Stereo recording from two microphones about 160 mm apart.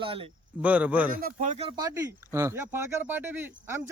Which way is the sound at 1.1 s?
65° right (ahead or behind).